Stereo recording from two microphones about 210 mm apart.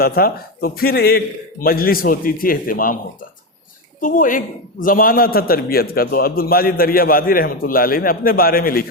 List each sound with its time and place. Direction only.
0.0 s a man's voice: 45° left (ahead or behind)
4.0 s a man's voice: 40° left (ahead or behind)